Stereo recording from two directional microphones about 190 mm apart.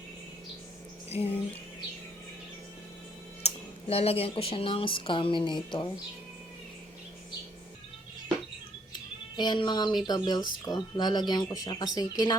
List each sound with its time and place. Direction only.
1.1 s speech: 30° left (ahead or behind)
3.4 s speech: 30° left (ahead or behind)
8.9 s bleat: 25° left (ahead or behind)
10.1 s speech: 20° left (ahead or behind)